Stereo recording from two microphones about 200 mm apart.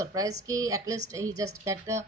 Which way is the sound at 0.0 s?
15° right (ahead or behind).